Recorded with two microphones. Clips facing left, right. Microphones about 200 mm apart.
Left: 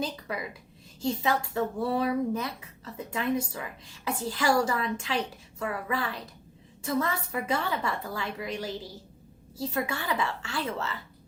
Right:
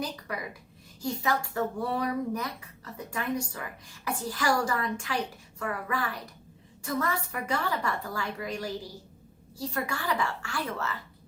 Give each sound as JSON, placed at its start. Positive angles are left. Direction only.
{"t": 1.0, "sound": "speech", "side_deg": 25}